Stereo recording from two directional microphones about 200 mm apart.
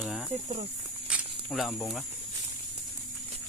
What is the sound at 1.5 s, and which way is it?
Speech, centre (ahead or behind).